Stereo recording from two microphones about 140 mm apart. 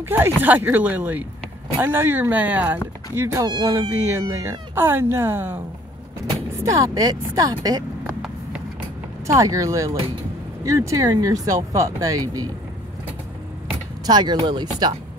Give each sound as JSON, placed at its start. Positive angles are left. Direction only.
{"t": 0.0, "sound": "speech", "side_deg": -15}
{"t": 9.3, "sound": "speech", "side_deg": -25}
{"t": 14.0, "sound": "speech", "side_deg": -30}